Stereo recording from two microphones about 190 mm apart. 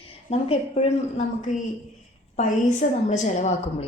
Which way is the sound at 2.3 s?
40° left (ahead or behind).